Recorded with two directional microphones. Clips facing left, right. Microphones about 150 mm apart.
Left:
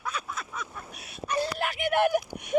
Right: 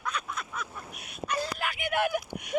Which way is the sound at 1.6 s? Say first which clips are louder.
Left 5 dB; 45° left (ahead or behind).